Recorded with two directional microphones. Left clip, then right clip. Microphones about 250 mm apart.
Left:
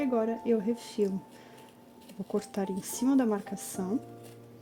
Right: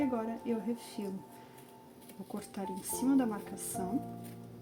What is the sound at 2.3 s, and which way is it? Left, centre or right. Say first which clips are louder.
Speech: left 9 dB; left.